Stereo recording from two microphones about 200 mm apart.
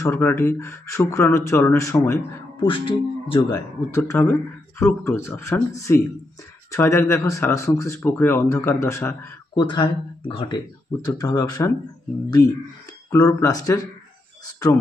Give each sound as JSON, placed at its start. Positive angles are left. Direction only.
{"t": 0.0, "sound": "a man's voice", "side_deg": 15}
{"t": 2.6, "sound": "speech", "side_deg": 25}
{"t": 3.5, "sound": "a man's voice", "side_deg": 15}